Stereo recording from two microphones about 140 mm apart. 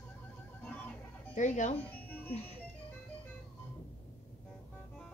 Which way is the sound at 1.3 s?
60° left (ahead or behind).